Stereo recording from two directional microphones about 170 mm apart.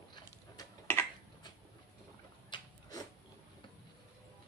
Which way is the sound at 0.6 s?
15° left (ahead or behind).